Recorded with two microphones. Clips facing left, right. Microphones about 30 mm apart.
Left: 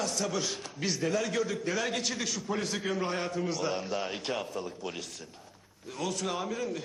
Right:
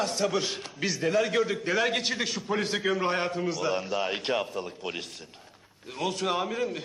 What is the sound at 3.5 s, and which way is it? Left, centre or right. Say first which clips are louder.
Speech: right 3 dB; centre.